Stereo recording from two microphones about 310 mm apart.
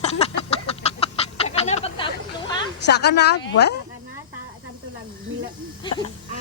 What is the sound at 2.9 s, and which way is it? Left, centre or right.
Speech, left.